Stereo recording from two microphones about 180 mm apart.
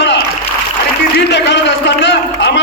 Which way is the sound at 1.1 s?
70° left (ahead or behind).